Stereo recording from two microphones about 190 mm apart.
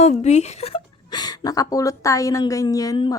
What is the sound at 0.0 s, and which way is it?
A woman's voice, 35° left (ahead or behind).